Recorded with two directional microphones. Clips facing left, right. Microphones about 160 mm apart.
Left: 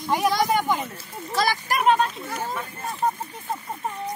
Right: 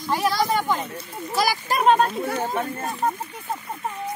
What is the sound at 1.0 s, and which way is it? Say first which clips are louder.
Speech: right 1 dB; 5° right (ahead or behind).